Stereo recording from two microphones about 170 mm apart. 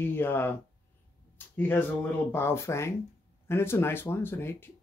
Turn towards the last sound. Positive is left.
turn(degrees=15)  # may be behind; listen again after turning